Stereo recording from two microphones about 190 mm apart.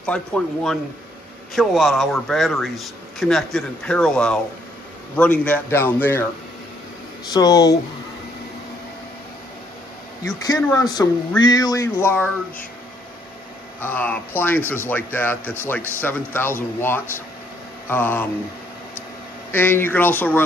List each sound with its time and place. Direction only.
0.0 s a man's voice: 5° left (ahead or behind)
7.2 s speech: 20° left (ahead or behind)
10.2 s speech: 20° left (ahead or behind)
13.7 s a man's voice: 10° left (ahead or behind)
19.5 s a man's voice: 10° left (ahead or behind)